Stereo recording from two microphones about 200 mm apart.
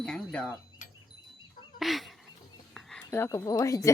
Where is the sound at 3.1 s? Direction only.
10° left (ahead or behind).